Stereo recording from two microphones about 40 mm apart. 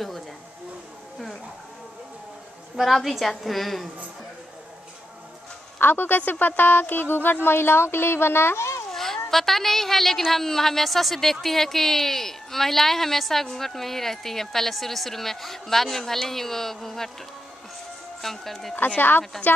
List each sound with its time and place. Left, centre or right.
2.8 s a woman's voice: centre
5.8 s speech: left
8.9 s speech: centre
18.2 s a woman's voice: centre
18.9 s speech: left